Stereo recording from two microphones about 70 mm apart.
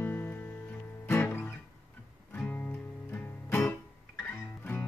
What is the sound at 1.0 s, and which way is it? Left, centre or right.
Guitar, left.